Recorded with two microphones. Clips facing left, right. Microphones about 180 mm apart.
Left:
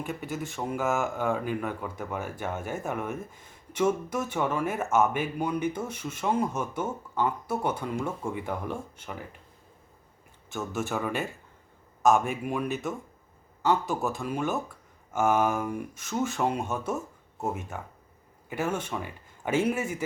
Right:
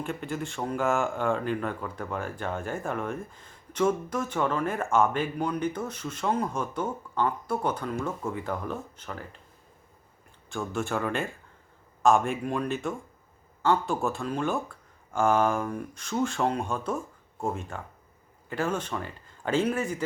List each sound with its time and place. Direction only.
0.1 s speech: 5° left (ahead or behind)
10.5 s speech: 5° left (ahead or behind)
12.5 s speech: 15° left (ahead or behind)